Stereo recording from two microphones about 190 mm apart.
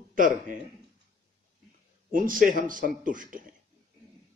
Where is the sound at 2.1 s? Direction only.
45° right (ahead or behind).